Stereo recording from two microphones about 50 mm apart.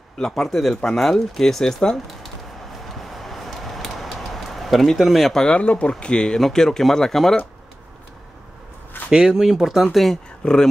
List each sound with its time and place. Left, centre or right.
0.2 s speech: centre
2.9 s a sound: centre
5.3 s speech: centre
5.6 s speech: left; by 7.3 s centre
9.1 s speech: centre
10.4 s speech: centre